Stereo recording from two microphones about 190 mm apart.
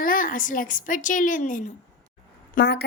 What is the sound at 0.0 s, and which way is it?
A woman's voice, 45° left (ahead or behind).